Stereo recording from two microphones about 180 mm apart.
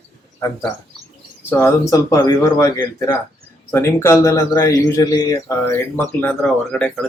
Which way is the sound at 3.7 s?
15° left (ahead or behind).